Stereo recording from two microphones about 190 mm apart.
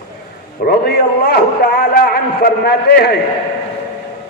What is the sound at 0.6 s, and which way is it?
A man's voice, 55° left (ahead or behind).